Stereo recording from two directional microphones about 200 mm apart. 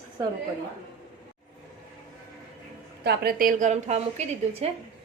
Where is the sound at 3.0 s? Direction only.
50° right (ahead or behind).